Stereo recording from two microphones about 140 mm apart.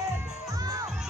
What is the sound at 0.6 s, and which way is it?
Music, 25° right (ahead or behind).